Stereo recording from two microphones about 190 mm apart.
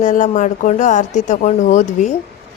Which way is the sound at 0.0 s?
40° left (ahead or behind).